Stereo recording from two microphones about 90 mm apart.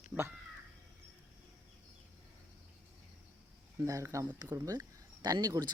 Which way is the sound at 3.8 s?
35° right (ahead or behind).